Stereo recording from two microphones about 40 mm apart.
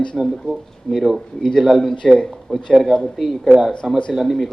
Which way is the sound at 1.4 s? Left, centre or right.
Centre.